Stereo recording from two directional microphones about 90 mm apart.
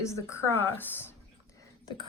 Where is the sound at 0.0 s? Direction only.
35° left (ahead or behind).